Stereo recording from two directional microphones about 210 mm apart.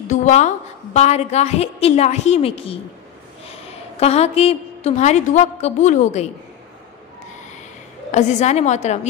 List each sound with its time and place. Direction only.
0.1 s a woman's voice: 35° left (ahead or behind)
4.0 s a woman's voice: 30° left (ahead or behind)
8.1 s a woman's voice: 35° left (ahead or behind)